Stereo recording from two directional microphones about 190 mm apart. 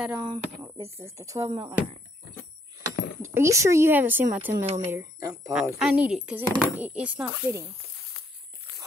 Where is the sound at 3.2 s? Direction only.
15° right (ahead or behind).